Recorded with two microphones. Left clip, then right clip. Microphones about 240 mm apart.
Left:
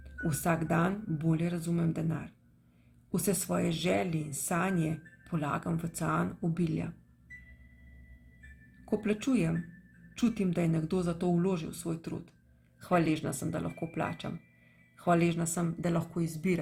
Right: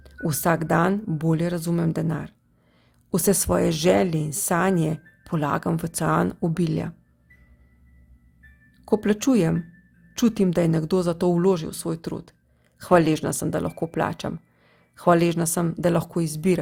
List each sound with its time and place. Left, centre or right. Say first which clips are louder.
0.0 s a woman's voice: right 9 dB; right
8.8 s a woman's voice: right 10 dB; right